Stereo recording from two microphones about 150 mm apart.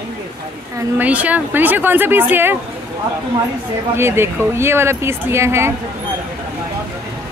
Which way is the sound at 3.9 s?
15° right (ahead or behind).